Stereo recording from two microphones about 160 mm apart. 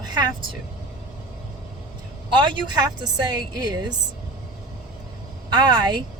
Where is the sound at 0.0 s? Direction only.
25° right (ahead or behind).